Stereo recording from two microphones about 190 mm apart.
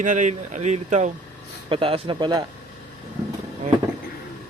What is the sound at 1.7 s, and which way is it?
Speech, 25° right (ahead or behind).